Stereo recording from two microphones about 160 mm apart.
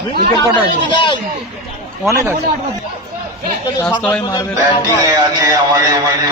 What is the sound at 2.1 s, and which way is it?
Speech, 20° right (ahead or behind).